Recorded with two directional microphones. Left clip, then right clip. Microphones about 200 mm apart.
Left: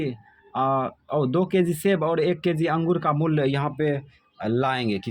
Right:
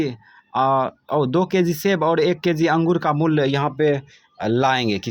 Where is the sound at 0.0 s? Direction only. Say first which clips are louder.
Right 5 dB; 25° right (ahead or behind).